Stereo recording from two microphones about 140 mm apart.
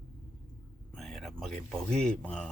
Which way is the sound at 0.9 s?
Centre (ahead or behind).